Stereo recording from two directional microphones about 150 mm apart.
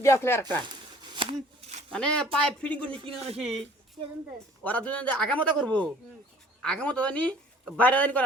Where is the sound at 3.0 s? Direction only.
40° right (ahead or behind).